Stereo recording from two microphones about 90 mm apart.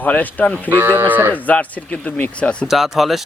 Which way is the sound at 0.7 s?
25° right (ahead or behind).